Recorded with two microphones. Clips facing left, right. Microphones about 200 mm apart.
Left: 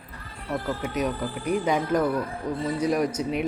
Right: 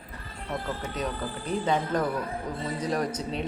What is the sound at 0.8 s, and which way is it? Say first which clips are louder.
Speech: left 5 dB; 10° left (ahead or behind).